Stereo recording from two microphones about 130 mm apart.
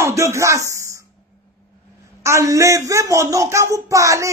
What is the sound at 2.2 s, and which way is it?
Speech, 25° right (ahead or behind).